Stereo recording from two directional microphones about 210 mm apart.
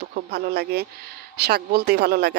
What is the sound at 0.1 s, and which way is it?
Speech, 50° right (ahead or behind).